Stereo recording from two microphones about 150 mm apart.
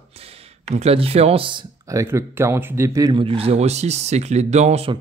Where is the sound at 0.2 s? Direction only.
45° right (ahead or behind).